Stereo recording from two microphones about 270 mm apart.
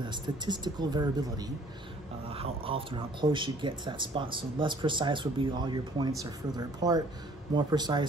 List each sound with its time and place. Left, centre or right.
0.0 s speech: centre